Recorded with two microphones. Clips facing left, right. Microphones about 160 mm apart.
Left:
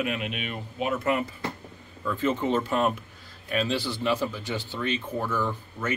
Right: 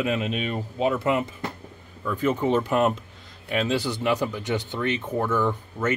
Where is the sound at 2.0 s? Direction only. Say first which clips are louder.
Right 2 dB; 10° right (ahead or behind).